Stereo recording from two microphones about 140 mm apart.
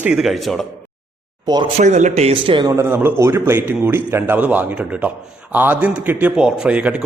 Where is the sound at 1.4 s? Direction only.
30° right (ahead or behind).